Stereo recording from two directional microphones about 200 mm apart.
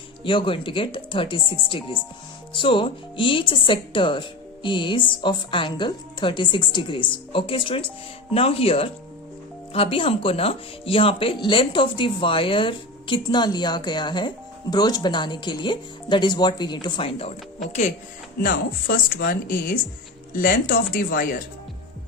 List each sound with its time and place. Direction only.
0.3 s speech: 25° left (ahead or behind)
18.4 s speech: 50° left (ahead or behind)